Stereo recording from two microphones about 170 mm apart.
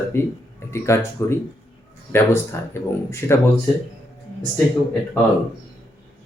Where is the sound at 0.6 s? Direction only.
15° left (ahead or behind).